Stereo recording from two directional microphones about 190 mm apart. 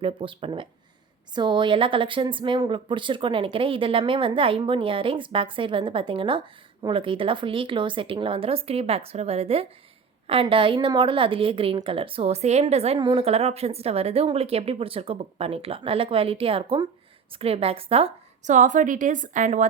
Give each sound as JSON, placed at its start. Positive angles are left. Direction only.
{"t": 0.0, "sound": "a woman's voice", "side_deg": -30}